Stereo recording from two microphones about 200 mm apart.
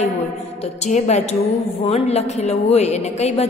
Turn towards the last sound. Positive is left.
turn(degrees=35)  # may be behind; listen again after turning